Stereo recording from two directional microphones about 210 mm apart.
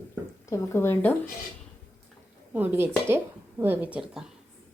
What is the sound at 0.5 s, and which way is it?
Speech, 15° left (ahead or behind).